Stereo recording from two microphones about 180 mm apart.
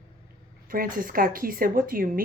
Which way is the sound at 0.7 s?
50° right (ahead or behind).